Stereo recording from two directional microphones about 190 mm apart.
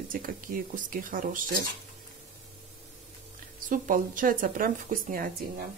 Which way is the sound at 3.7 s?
45° right (ahead or behind).